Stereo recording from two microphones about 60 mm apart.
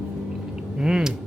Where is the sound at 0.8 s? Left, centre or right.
Centre.